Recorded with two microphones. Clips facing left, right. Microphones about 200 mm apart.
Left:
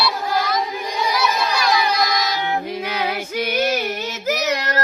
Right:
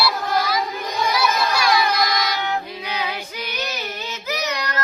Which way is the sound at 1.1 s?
Centre (ahead or behind).